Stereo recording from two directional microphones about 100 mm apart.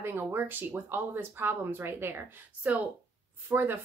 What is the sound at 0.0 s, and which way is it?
Speech, 20° right (ahead or behind).